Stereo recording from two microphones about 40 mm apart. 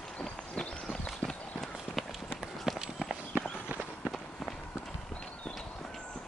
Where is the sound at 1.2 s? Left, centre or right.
Centre.